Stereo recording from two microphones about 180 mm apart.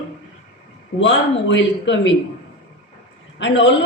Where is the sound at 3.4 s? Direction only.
90° left.